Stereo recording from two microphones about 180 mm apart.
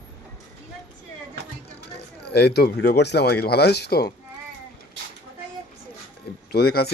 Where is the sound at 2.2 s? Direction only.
65° left (ahead or behind).